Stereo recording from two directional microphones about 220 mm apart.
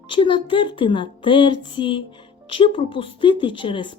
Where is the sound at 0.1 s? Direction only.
25° left (ahead or behind).